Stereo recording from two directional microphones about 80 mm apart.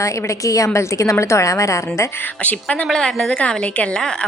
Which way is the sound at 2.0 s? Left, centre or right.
Left.